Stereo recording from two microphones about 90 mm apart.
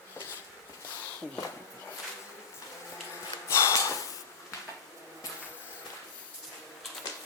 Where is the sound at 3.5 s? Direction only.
30° left (ahead or behind).